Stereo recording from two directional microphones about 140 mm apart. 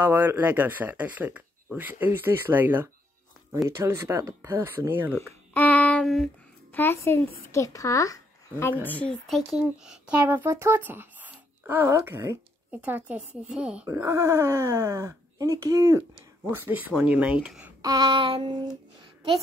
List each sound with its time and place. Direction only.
0.0 s speech: 15° right (ahead or behind)
5.5 s female singing: 10° left (ahead or behind)
6.7 s speech: 15° left (ahead or behind)
8.8 s speech: 10° left (ahead or behind); by 13.8 s 10° right (ahead or behind)
13.8 s speech: 20° right (ahead or behind)
17.8 s a sound: 25° right (ahead or behind)